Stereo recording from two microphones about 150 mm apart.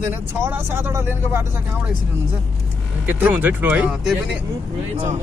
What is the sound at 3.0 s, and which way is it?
Speech, 10° right (ahead or behind).